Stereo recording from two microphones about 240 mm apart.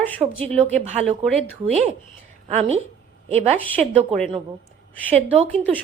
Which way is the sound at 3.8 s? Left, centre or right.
Centre.